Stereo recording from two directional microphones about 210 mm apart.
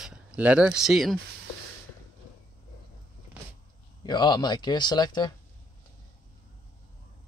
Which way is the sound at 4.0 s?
20° left (ahead or behind).